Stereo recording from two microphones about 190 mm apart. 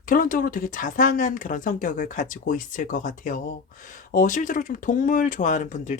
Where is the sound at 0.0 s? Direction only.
45° left (ahead or behind).